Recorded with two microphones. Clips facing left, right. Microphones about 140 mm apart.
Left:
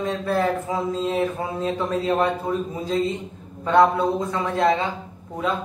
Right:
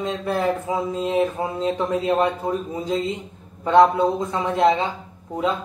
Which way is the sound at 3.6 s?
15° right (ahead or behind).